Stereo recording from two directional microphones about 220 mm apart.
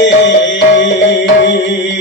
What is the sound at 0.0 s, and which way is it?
Music, 55° left (ahead or behind).